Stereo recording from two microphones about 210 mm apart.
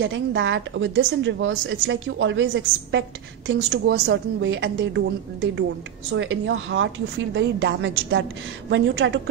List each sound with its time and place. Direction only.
0.0 s a woman's voice: 60° right (ahead or behind)